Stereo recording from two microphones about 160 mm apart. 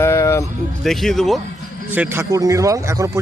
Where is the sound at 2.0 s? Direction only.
15° right (ahead or behind).